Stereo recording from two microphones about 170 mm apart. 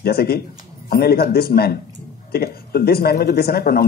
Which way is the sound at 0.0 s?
65° left (ahead or behind).